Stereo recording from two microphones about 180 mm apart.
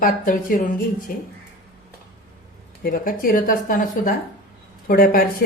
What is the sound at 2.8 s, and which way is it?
A woman's voice, 50° left (ahead or behind).